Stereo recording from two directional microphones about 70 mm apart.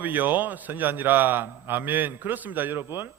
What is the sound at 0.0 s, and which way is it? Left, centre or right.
A man's voice, right.